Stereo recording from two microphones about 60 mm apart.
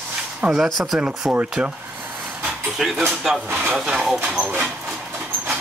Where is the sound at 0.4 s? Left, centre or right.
Centre.